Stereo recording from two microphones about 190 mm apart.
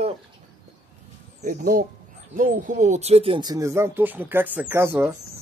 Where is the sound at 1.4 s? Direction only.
45° right (ahead or behind); by 5.1 s 10° right (ahead or behind).